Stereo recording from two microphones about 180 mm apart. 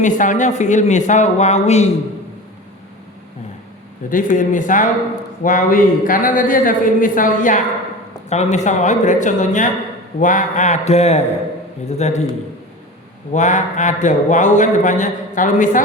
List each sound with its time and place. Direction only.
0.0 s a man's voice: 45° left (ahead or behind)
4.1 s a man's voice: 45° left (ahead or behind)
13.3 s a man's voice: 45° left (ahead or behind)